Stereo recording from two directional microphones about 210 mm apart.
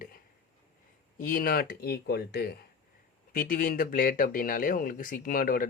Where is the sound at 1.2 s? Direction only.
40° left (ahead or behind).